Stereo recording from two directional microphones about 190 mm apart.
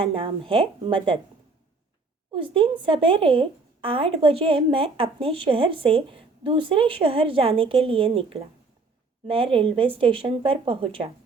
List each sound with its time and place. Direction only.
0.0 s a woman's voice: 30° right (ahead or behind)
2.3 s a woman's voice: 30° right (ahead or behind)